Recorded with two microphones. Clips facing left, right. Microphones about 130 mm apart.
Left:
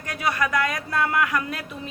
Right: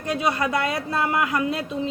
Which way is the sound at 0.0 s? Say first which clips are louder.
Right 2 dB; 25° right (ahead or behind).